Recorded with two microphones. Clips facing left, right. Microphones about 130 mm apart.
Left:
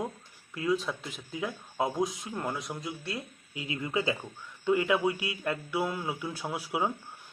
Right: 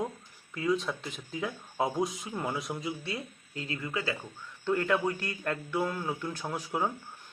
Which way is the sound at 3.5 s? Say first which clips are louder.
Left 3 dB; 15° left (ahead or behind).